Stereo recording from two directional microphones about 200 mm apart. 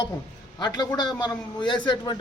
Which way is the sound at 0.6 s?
20° left (ahead or behind).